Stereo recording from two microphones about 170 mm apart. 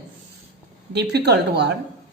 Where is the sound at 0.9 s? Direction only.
80° right.